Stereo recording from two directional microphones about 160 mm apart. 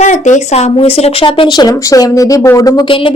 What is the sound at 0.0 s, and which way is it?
Speech, 50° left (ahead or behind).